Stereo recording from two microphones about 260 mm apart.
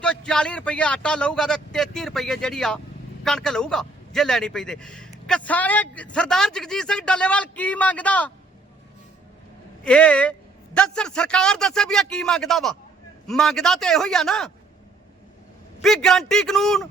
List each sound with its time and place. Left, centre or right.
0.0 s a man's voice: centre
9.8 s a man's voice: centre
15.8 s a man's voice: centre